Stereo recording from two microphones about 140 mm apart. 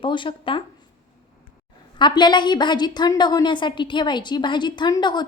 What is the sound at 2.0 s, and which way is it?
A woman's voice, 35° left (ahead or behind).